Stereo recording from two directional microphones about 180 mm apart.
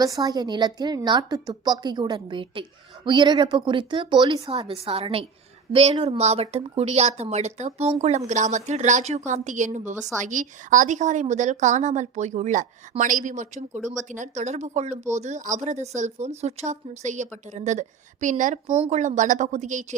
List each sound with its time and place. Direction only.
0.0 s a woman's voice: 20° right (ahead or behind); by 19.8 s 45° right (ahead or behind)